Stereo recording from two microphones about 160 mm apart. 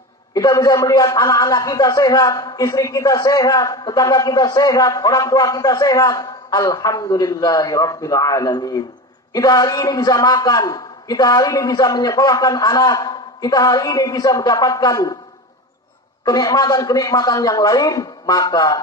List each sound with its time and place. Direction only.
0.3 s a man's voice: 25° left (ahead or behind)
16.3 s a man's voice: 25° left (ahead or behind)